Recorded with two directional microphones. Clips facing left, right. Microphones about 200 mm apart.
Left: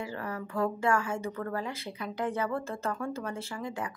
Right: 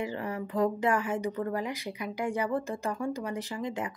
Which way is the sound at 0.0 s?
20° right (ahead or behind).